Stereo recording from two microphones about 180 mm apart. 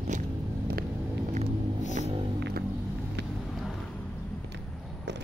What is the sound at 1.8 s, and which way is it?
Music, 40° left (ahead or behind).